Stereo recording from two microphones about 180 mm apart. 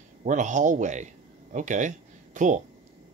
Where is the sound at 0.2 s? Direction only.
45° right (ahead or behind).